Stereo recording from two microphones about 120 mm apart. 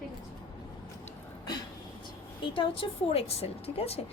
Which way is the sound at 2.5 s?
50° left (ahead or behind).